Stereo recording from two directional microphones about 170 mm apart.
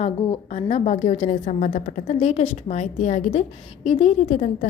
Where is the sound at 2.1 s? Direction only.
40° left (ahead or behind).